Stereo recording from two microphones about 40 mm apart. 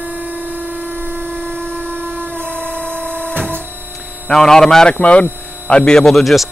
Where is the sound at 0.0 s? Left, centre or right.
Right.